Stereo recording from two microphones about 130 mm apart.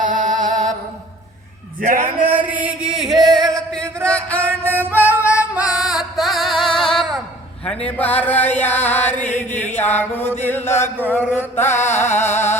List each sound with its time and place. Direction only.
0.0 s music: 80° right
2.5 s a sound: 10° right (ahead or behind); by 4.4 s 10° left (ahead or behind)
4.4 s music: 15° right (ahead or behind)
4.9 s music: 15° left (ahead or behind)
5.5 s music: 5° right (ahead or behind)
7.9 s music: 10° left (ahead or behind)
9.2 s chant: 15° left (ahead or behind)
9.7 s music: 15° left (ahead or behind)